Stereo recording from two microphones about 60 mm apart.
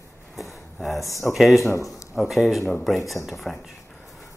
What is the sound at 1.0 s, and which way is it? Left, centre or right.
Speech, left.